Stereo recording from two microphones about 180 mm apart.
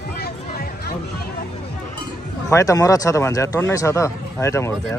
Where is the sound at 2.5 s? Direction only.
20° left (ahead or behind).